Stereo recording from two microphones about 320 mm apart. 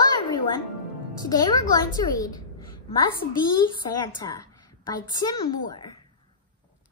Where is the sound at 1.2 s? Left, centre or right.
Centre.